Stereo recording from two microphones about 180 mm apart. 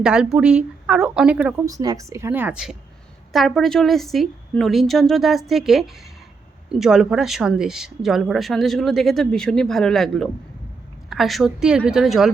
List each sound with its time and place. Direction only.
0.0 s speech: 5° right (ahead or behind)
1.6 s a woman's voice: 20° right (ahead or behind); by 12.3 s centre (ahead or behind)